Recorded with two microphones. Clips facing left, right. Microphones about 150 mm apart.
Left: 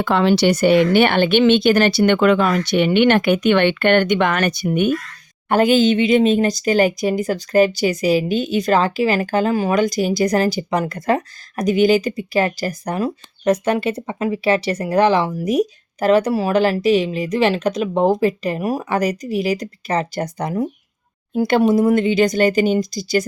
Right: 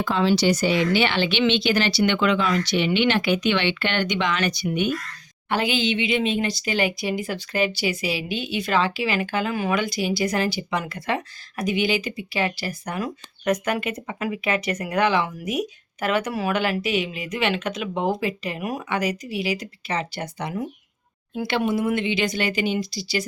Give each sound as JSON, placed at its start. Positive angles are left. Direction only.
{"t": 0.0, "sound": "speech", "side_deg": 65}